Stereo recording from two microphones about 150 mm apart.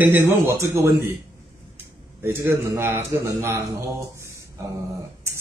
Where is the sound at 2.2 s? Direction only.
15° right (ahead or behind).